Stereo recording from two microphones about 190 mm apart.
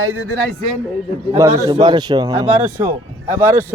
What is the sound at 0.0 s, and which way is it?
Speech, 90° right.